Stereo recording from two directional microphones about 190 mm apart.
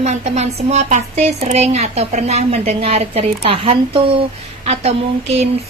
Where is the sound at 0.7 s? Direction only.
35° right (ahead or behind).